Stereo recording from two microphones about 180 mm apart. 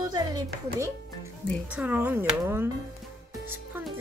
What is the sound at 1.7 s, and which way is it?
Speech, 10° right (ahead or behind).